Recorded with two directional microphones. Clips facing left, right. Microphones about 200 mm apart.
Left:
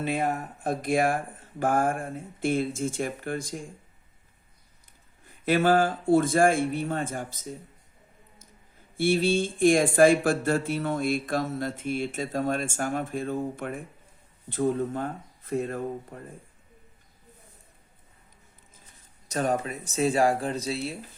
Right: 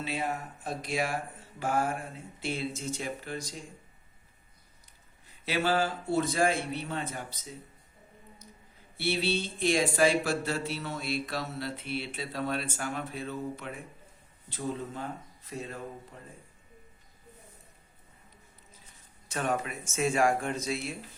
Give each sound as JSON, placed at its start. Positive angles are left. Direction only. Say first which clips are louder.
{"t": 0.0, "sound": "speech", "louder": "left 6 dB", "side_deg": 50}
{"t": 5.2, "sound": "speech", "louder": "left 7 dB", "side_deg": 50}
{"t": 9.0, "sound": "speech", "louder": "left 7 dB", "side_deg": 45}
{"t": 19.3, "sound": "speech", "louder": "left 4 dB", "side_deg": 40}